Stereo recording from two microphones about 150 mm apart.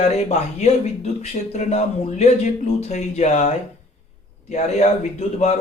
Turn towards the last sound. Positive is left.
turn(degrees=45)  # may be behind; listen again after turning